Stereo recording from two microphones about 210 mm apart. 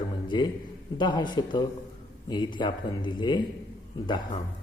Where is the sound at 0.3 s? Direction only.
20° left (ahead or behind).